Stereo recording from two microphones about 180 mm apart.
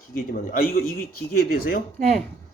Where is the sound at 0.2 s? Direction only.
55° left (ahead or behind).